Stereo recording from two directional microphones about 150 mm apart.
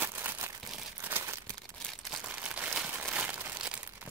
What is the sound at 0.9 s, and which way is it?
Crumpling, 15° right (ahead or behind).